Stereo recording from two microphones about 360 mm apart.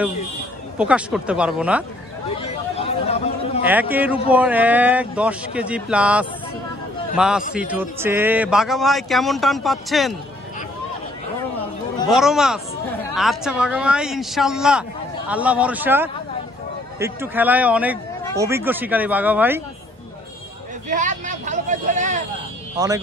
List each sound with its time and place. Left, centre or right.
0.7 s a man's voice: centre
2.2 s chatter: centre
3.9 s a man's voice: centre
12.1 s a man's voice: centre
20.9 s speech: right
22.8 s speech: centre